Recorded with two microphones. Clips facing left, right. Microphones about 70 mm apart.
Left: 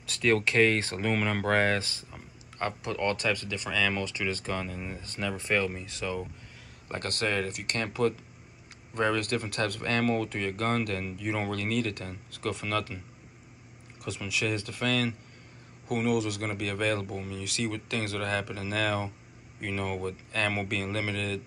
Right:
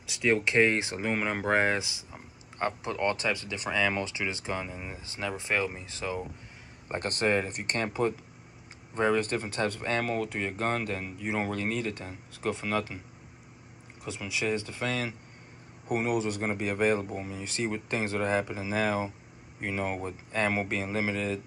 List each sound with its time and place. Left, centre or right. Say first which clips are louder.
0.0 s speech: left 1 dB; centre
2.6 s speech: right 1 dB; right
7.8 s speech: left 2 dB; right
14.0 s speech: even; right